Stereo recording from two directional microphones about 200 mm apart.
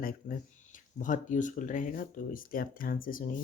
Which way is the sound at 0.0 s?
45° left (ahead or behind).